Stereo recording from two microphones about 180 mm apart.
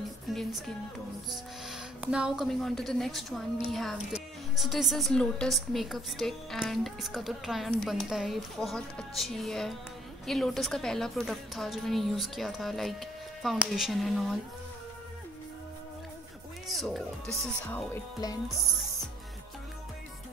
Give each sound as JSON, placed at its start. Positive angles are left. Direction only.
{"t": 0.3, "sound": "speech", "side_deg": 0}
{"t": 16.6, "sound": "speech", "side_deg": 0}
{"t": 18.2, "sound": "speech", "side_deg": 20}